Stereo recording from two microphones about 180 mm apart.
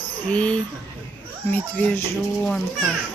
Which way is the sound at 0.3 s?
5° left (ahead or behind).